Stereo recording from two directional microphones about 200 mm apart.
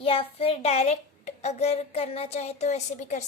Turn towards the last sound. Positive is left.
turn(degrees=35)  # may be behind; listen again after turning